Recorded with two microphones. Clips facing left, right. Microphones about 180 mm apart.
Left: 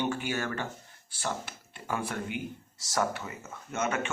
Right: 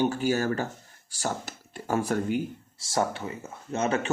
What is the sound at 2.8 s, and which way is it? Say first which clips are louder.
A man's voice: right 3 dB; 30° right (ahead or behind).